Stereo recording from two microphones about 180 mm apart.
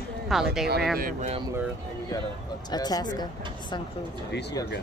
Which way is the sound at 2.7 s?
20° left (ahead or behind).